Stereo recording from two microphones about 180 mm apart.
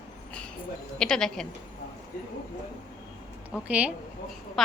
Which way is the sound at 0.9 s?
5° left (ahead or behind).